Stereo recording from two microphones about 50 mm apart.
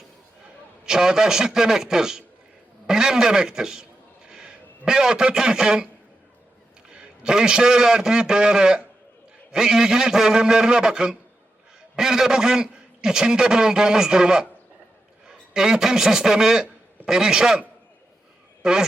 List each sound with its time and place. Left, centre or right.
0.9 s a man's voice: centre
6.9 s a man's voice: centre
15.5 s a man's voice: centre
18.6 s speech: centre